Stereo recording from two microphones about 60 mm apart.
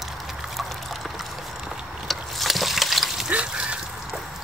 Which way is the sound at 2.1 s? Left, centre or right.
Centre.